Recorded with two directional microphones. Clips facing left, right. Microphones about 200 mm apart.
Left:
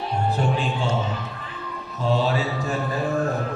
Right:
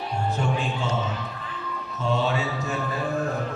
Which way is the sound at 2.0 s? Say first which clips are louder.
Left 3 dB; 35° left (ahead or behind).